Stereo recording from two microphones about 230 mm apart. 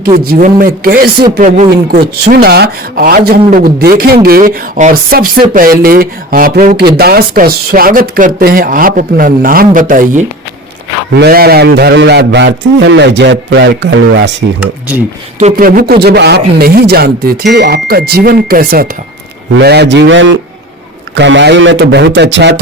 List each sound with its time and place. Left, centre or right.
0.1 s a man's voice: right
14.6 s speech: centre
15.4 s a man's voice: right